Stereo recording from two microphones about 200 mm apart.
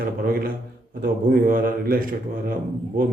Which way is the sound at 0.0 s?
45° right (ahead or behind).